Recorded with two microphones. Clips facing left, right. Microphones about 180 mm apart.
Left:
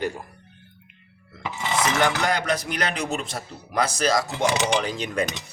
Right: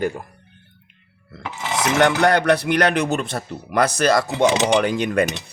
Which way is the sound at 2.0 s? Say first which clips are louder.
Right 7 dB; 70° right (ahead or behind).